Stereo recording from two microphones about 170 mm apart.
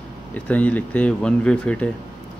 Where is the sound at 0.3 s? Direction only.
10° left (ahead or behind).